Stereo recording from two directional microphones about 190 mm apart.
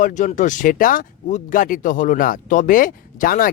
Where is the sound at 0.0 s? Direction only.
40° left (ahead or behind).